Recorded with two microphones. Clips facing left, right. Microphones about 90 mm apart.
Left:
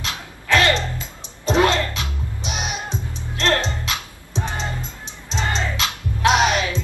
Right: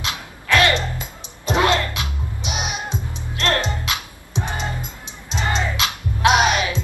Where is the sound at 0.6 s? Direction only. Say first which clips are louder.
Right 1 dB; 20° right (ahead or behind).